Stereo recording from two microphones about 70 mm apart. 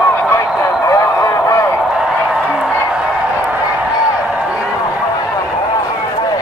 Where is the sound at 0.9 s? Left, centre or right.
Left.